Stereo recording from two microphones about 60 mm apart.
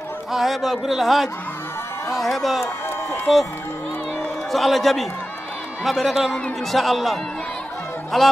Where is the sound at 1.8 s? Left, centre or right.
Left.